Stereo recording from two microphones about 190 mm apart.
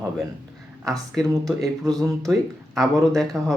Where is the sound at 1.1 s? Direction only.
Centre (ahead or behind).